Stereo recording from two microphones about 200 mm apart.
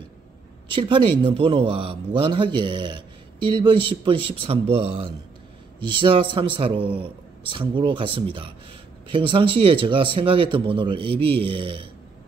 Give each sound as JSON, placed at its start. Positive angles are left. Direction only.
{"t": 0.7, "sound": "speech", "side_deg": -25}